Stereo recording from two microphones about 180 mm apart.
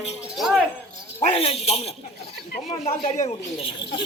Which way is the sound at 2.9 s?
40° left (ahead or behind).